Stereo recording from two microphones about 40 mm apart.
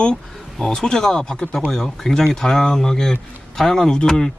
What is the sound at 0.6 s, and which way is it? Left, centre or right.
Speech, centre.